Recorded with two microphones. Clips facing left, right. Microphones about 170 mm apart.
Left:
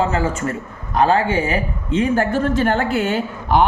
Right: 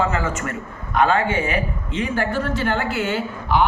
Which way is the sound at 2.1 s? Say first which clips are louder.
Left 5 dB; 45° left (ahead or behind).